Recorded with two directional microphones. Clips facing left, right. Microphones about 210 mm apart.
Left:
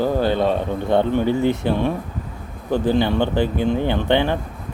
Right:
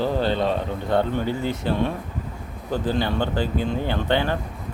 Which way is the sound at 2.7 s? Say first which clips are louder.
Left 5 dB; 20° left (ahead or behind).